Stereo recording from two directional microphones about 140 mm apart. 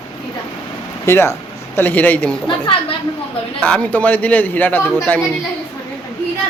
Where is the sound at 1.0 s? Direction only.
20° left (ahead or behind).